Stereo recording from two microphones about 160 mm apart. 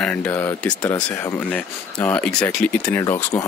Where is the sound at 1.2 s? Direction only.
10° left (ahead or behind).